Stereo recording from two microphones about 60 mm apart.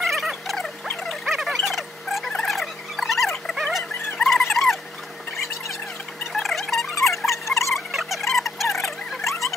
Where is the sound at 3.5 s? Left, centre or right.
Centre.